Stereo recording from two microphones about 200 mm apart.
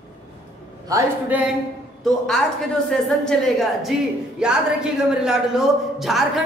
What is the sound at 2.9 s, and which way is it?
A woman's voice, centre (ahead or behind).